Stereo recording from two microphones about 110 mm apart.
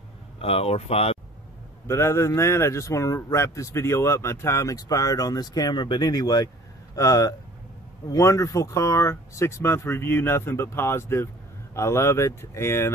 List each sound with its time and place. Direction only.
0.4 s speech: 65° left (ahead or behind)
1.9 s speech: 25° left (ahead or behind)